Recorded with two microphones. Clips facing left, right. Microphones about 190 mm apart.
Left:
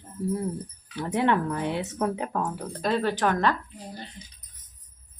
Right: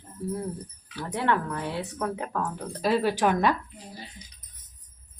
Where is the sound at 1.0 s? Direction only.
20° left (ahead or behind).